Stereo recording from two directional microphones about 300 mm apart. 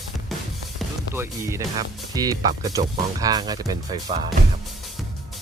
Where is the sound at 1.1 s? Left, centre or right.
Centre.